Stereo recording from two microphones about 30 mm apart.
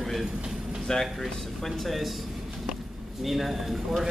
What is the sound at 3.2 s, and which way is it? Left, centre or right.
Speech, centre.